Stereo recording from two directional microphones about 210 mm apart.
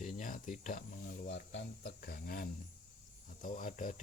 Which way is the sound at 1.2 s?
55° left (ahead or behind).